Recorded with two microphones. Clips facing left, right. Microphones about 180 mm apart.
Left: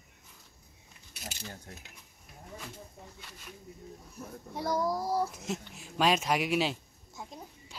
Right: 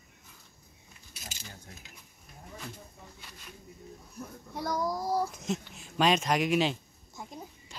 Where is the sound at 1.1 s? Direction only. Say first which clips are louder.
Left 4 dB; 60° left (ahead or behind).